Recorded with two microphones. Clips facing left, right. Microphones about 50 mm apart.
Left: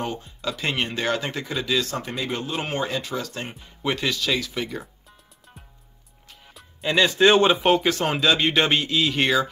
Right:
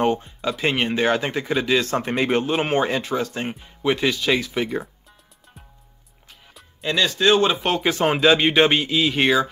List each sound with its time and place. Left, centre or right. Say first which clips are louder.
0.0 s speech: right 9 dB; right
0.5 s speech: right 4 dB; centre
6.5 s music: even; centre
7.0 s a man's voice: left 1 dB; left
7.8 s speech: right 4 dB; centre